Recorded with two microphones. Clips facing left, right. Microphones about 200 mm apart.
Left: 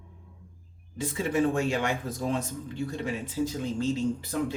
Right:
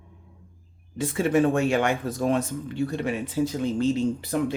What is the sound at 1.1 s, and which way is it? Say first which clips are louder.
Speech: right 5 dB; 70° right (ahead or behind).